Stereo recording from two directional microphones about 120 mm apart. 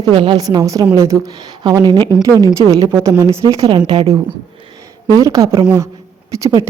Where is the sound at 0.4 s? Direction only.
30° right (ahead or behind).